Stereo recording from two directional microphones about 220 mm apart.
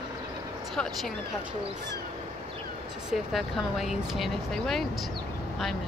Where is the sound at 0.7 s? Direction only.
Centre (ahead or behind).